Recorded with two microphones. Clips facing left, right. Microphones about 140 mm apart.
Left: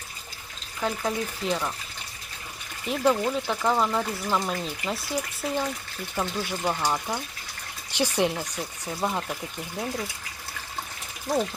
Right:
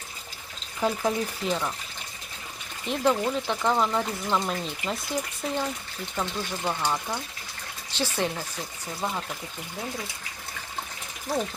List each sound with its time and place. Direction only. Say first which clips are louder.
0.8 s speech: right 2 dB; 10° right (ahead or behind)
1.5 s speech: left 1 dB; centre (ahead or behind)
2.8 s speech: left 1 dB; centre (ahead or behind)